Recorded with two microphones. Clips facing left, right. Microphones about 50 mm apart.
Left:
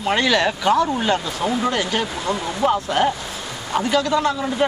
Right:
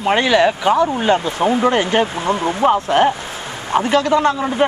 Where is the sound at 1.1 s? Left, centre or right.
Right.